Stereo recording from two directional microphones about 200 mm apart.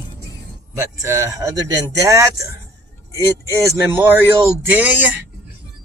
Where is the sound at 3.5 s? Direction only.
15° right (ahead or behind).